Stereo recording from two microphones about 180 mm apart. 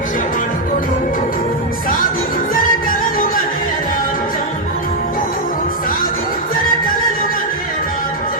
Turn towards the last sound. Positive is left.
turn(degrees=50)  # may be behind; listen again after turning